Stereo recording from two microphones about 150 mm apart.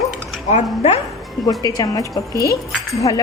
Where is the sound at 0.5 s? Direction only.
45° left (ahead or behind).